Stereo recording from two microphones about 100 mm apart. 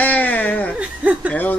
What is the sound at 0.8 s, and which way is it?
Speech, 15° right (ahead or behind).